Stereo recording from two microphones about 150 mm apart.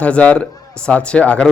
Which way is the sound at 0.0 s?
10° left (ahead or behind).